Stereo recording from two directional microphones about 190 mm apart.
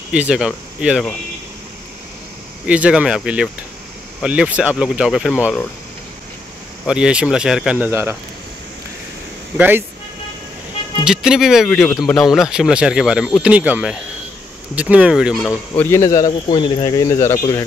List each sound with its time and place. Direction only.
0.1 s speech: 5° right (ahead or behind)
2.6 s speech: 5° right (ahead or behind)
6.9 s speech: 5° right (ahead or behind)
9.6 s speech: 10° right (ahead or behind)
11.1 s speech: 5° right (ahead or behind)
15.7 s speech: 10° left (ahead or behind)